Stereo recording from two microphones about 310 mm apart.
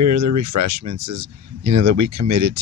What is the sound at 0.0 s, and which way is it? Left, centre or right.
Speech, right.